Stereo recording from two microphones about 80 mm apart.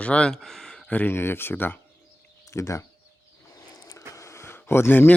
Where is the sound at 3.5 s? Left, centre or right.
Left.